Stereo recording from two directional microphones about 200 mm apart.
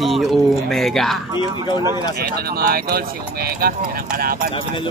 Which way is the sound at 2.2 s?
50° right (ahead or behind).